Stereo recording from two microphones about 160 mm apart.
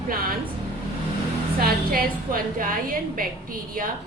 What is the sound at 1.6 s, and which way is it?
A woman's voice, 70° right (ahead or behind).